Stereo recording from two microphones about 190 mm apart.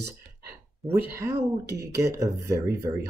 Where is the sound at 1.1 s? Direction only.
15° right (ahead or behind).